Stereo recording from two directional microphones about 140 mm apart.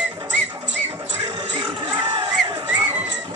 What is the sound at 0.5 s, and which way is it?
Music, 20° right (ahead or behind).